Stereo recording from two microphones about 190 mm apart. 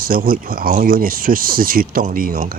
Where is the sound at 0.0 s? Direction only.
45° right (ahead or behind).